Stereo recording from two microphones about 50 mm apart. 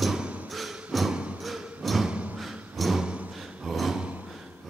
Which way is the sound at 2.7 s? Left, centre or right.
Centre.